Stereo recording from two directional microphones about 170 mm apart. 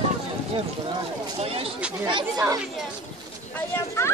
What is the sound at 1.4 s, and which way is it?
Speech, 35° right (ahead or behind).